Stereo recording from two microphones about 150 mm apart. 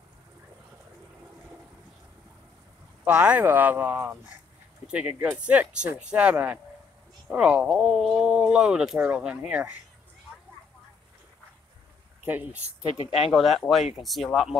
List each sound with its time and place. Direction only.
3.1 s speech: 10° right (ahead or behind)
13.0 s speech: 40° left (ahead or behind)
13.3 s speech: centre (ahead or behind)